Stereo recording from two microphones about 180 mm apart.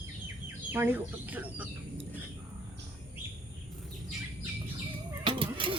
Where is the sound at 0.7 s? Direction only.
10° right (ahead or behind).